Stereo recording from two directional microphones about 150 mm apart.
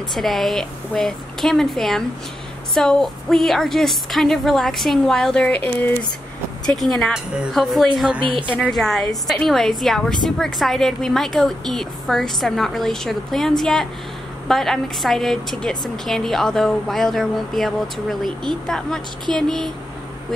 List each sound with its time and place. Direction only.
0.1 s a woman's voice: centre (ahead or behind)
8.2 s a woman's voice: 35° right (ahead or behind)
8.5 s a woman's voice: centre (ahead or behind)